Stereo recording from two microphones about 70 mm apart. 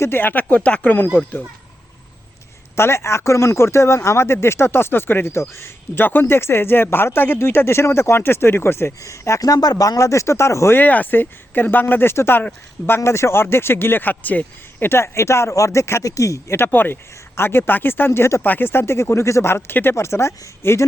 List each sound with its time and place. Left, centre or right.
0.0 s speech: left
2.7 s speech: left
9.0 s speech: left
9.4 s speech: left
10.8 s speech: left
16.6 s speech: left
18.4 s speech: left